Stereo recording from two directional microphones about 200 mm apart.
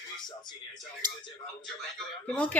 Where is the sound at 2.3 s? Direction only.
5° left (ahead or behind).